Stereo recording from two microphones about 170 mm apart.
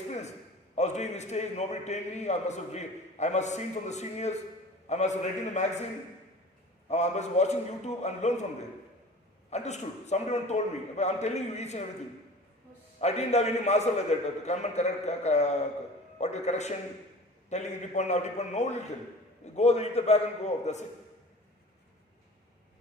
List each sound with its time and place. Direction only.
0.8 s a man's voice: 40° left (ahead or behind)
6.8 s a man's voice: 40° left (ahead or behind)
9.5 s a man's voice: 40° left (ahead or behind)
13.0 s a man's voice: 40° left (ahead or behind)